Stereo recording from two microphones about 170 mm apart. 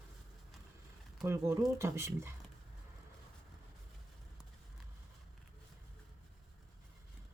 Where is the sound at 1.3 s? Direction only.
15° right (ahead or behind).